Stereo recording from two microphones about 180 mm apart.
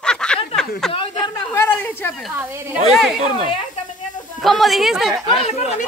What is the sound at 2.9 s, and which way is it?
Speech, centre (ahead or behind).